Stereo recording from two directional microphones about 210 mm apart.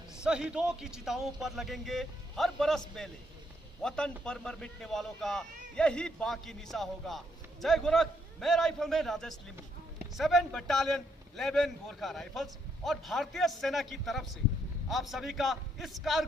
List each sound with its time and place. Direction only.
0.2 s a man's voice: 5° right (ahead or behind)